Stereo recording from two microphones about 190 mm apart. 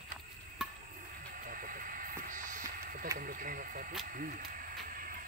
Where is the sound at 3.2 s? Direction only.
45° right (ahead or behind).